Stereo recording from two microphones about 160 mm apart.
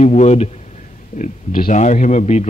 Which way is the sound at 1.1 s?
55° left (ahead or behind).